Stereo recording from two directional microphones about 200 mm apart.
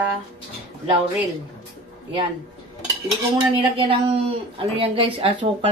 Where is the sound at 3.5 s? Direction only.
25° right (ahead or behind).